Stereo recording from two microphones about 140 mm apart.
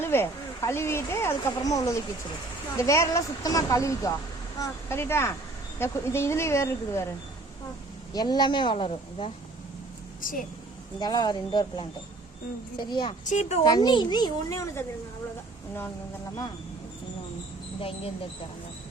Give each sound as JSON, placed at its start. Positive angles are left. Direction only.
{"t": 0.0, "sound": "speech", "side_deg": 15}
{"t": 8.1, "sound": "speech", "side_deg": 30}
{"t": 10.2, "sound": "speech", "side_deg": 80}
{"t": 11.0, "sound": "speech", "side_deg": 30}
{"t": 13.2, "sound": "speech", "side_deg": 55}
{"t": 13.7, "sound": "speech", "side_deg": 30}
{"t": 17.7, "sound": "speech", "side_deg": 40}